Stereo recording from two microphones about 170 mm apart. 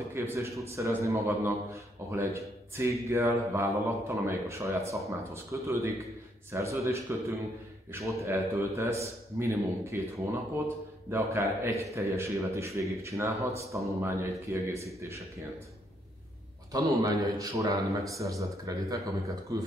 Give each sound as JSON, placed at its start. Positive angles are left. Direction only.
{"t": 0.1, "sound": "a man's voice", "side_deg": -15}
{"t": 16.7, "sound": "speech", "side_deg": -20}